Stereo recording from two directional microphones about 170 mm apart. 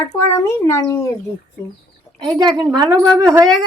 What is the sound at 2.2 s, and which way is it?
A woman's voice, 25° right (ahead or behind).